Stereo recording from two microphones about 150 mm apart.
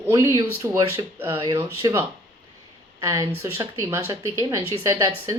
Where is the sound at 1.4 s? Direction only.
30° right (ahead or behind).